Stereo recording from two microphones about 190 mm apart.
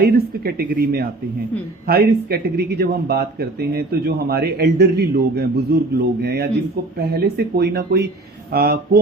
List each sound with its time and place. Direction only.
0.0 s speech: 55° right (ahead or behind)